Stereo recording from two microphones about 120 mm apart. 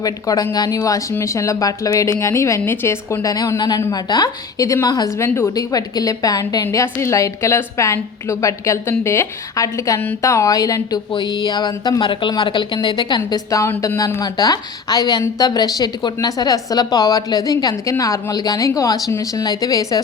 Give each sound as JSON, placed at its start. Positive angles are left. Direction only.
{"t": 0.0, "sound": "a woman's voice", "side_deg": 30}
{"t": 11.1, "sound": "speech", "side_deg": 40}